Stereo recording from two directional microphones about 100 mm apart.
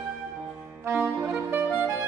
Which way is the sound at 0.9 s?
20° right (ahead or behind).